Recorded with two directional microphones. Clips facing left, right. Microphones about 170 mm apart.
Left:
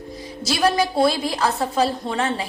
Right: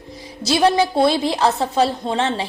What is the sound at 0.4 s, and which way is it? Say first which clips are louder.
A woman's voice: right 4 dB; 25° right (ahead or behind).